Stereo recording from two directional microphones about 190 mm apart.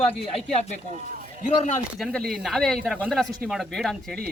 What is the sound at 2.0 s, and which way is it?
A man's voice, centre (ahead or behind).